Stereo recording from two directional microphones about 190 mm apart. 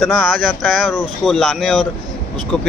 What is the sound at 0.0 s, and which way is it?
Speech, centre (ahead or behind).